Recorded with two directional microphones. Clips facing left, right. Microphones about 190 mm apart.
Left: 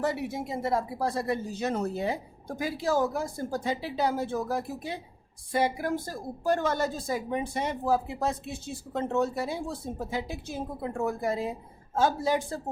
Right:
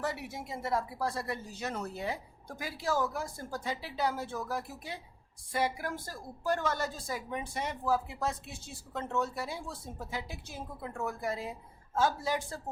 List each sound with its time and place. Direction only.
0.0 s a woman's voice: 20° left (ahead or behind)